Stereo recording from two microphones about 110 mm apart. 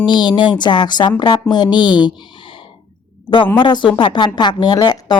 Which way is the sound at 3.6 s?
45° left (ahead or behind).